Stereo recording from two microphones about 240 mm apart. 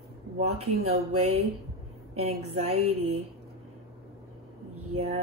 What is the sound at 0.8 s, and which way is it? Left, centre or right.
Speech, right.